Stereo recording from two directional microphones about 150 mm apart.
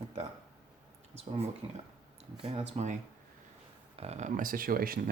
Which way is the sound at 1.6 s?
35° right (ahead or behind).